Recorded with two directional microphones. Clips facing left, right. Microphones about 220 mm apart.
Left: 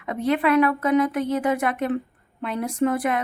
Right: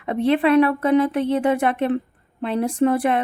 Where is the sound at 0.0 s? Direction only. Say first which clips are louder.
Right 4 dB; 30° right (ahead or behind).